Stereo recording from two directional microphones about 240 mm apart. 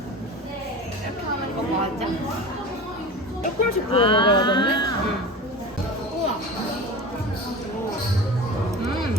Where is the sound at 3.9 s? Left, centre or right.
Left.